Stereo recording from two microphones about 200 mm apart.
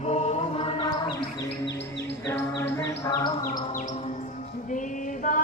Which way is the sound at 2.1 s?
10° left (ahead or behind).